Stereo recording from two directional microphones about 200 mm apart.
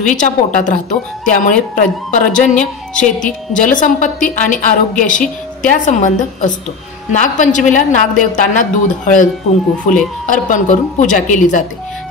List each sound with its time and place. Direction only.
0.1 s speech: 40° left (ahead or behind)